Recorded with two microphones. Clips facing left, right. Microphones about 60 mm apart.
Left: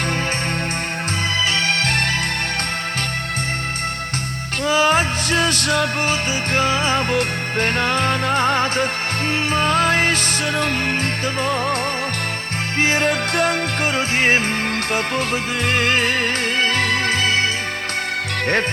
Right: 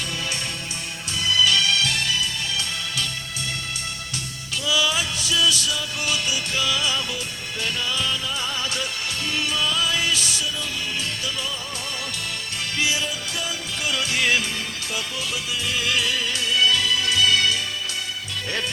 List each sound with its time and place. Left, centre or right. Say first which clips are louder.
1.4 s music: right 1 dB; left
4.6 s music: left 7 dB; left
6.1 s music: left 5 dB; left
12.8 s music: left 9 dB; left
13.9 s music: left 4 dB; left
15.6 s music: left 6 dB; left